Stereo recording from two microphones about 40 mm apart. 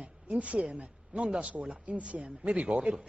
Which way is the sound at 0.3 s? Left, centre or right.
Right.